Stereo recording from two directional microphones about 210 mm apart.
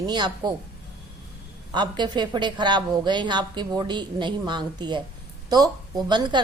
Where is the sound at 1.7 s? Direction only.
20° right (ahead or behind).